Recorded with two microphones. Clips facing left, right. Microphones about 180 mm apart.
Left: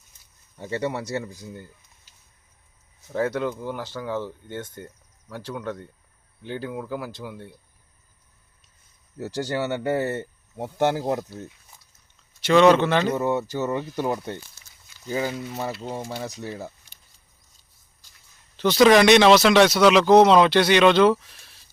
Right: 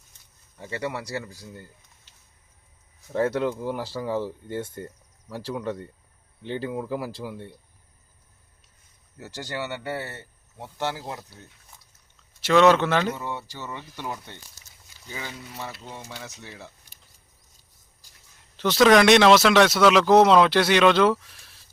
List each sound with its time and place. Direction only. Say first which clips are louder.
0.6 s speech: left 4 dB; 25° left (ahead or behind)
3.1 s speech: right 1 dB; centre (ahead or behind)
9.1 s speech: left 7 dB; 40° left (ahead or behind)
12.4 s speech: left 2 dB; centre (ahead or behind)
13.1 s speech: left 11 dB; 45° left (ahead or behind)
14.6 s a sound: even; 40° right (ahead or behind)
15.1 s speech: left 10 dB; 40° left (ahead or behind)
18.5 s speech: left 2 dB; centre (ahead or behind)